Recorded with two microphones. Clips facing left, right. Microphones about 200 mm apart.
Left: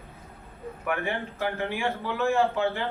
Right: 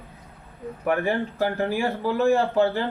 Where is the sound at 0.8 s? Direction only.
35° right (ahead or behind).